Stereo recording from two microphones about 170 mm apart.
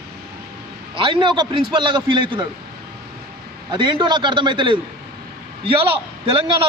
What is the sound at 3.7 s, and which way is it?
A man's voice, 30° right (ahead or behind).